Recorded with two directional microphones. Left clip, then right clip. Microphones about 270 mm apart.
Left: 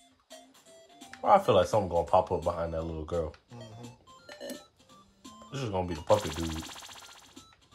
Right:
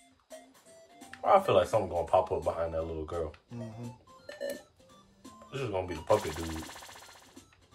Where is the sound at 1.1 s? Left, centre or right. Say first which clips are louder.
Left 1 dB; left.